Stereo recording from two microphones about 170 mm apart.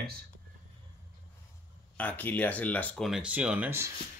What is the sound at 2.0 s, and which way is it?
Speech, 10° left (ahead or behind).